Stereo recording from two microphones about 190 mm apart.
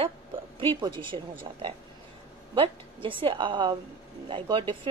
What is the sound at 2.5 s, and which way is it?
A woman's voice, 25° right (ahead or behind).